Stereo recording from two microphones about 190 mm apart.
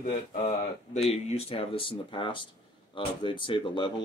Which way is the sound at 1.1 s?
35° left (ahead or behind).